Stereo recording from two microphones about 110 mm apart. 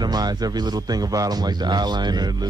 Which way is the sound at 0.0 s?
40° right (ahead or behind).